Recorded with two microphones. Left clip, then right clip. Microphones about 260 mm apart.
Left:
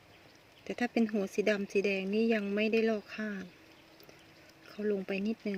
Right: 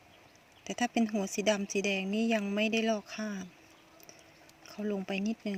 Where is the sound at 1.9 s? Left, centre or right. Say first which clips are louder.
Even; right.